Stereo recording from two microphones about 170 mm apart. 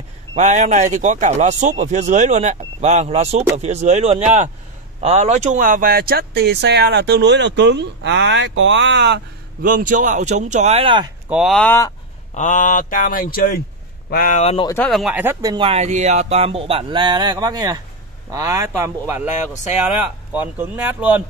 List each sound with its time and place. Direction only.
0.3 s a man's voice: 45° right (ahead or behind); by 9.2 s 90° right
9.6 s a man's voice: 55° right (ahead or behind); by 11.1 s 30° right (ahead or behind)
11.2 s speech: 5° right (ahead or behind)
12.4 s speech: 45° left (ahead or behind)
14.4 s speech: 40° left (ahead or behind)
14.9 s speech: centre (ahead or behind)
15.4 s speech: 30° right (ahead or behind)
20.3 s speech: 10° right (ahead or behind)